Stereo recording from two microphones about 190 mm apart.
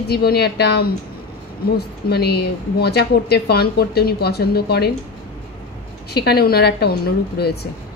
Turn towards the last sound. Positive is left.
turn(degrees=55)  # may be behind; listen again after turning